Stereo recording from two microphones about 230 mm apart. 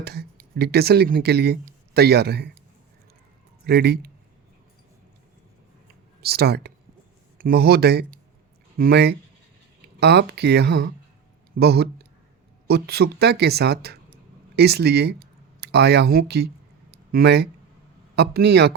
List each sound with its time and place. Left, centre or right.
0.0 s speech: right
3.7 s speech: right
6.2 s speech: right
16.9 s a sound: right
18.2 s speech: right